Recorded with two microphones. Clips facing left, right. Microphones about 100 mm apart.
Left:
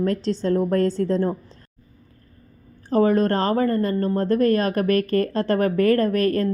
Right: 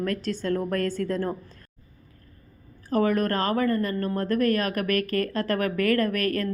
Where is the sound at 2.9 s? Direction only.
30° left (ahead or behind).